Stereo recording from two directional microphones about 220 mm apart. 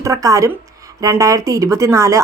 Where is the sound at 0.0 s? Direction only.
15° right (ahead or behind).